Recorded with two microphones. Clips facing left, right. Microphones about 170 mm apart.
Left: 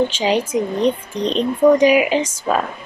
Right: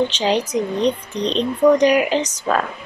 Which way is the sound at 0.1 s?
5° left (ahead or behind).